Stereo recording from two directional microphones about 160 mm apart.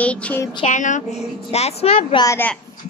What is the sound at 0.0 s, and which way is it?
Speech, 10° left (ahead or behind).